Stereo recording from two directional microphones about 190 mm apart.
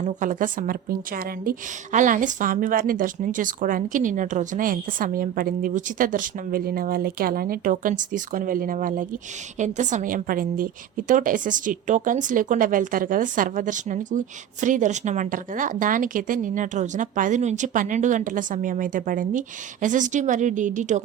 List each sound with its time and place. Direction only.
0.0 s a woman's voice: 40° right (ahead or behind)